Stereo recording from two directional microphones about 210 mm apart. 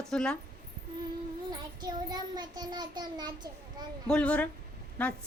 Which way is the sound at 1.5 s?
20° right (ahead or behind).